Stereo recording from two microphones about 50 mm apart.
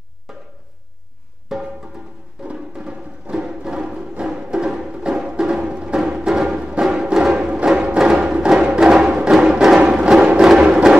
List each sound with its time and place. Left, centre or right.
0.3 s a sound: centre
1.5 s music: centre
2.4 s music: centre